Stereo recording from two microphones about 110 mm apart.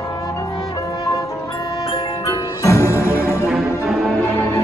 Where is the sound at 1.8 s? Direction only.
35° left (ahead or behind).